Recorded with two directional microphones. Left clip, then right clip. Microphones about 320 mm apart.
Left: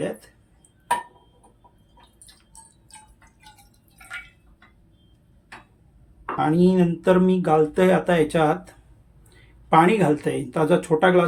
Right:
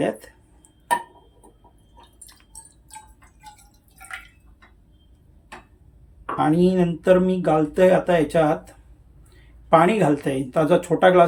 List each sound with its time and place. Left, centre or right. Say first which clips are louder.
6.3 s speech: right 1 dB; centre